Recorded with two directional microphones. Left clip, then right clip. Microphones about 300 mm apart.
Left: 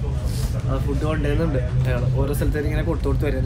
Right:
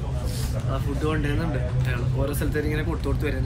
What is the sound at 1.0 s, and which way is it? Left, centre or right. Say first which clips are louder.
A man's voice: left 3 dB; centre.